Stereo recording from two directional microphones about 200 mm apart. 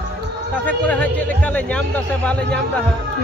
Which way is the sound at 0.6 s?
5° left (ahead or behind).